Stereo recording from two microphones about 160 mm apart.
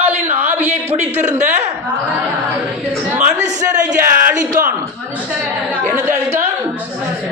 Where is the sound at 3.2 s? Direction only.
50° right (ahead or behind).